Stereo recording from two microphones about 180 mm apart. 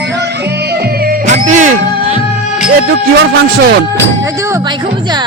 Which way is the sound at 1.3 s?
40° right (ahead or behind).